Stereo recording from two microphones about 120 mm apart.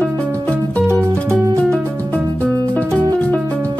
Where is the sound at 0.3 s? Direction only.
10° left (ahead or behind).